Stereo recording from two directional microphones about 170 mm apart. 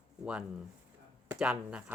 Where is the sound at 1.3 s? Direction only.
5° right (ahead or behind).